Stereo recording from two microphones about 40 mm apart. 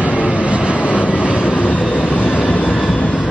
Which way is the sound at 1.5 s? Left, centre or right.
Left.